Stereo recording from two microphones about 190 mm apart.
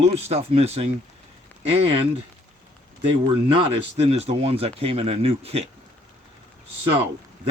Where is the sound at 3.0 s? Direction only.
25° right (ahead or behind).